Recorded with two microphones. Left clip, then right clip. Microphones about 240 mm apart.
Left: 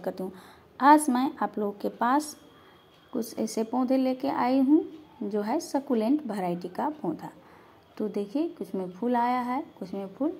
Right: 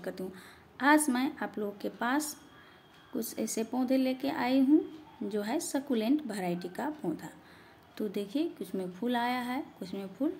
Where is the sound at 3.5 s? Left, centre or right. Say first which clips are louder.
Left 4 dB; centre.